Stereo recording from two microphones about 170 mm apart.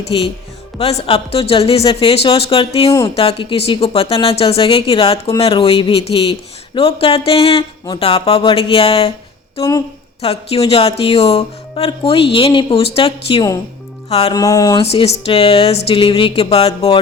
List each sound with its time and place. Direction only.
0.1 s speech: 30° left (ahead or behind)
10.2 s speech: 35° left (ahead or behind)
14.3 s speech: 20° left (ahead or behind)
14.8 s speech: 35° left (ahead or behind)